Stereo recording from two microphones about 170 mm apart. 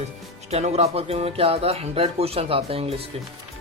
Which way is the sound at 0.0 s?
40° right (ahead or behind).